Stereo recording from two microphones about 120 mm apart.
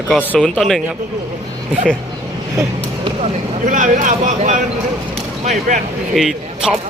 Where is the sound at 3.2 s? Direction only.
90° right.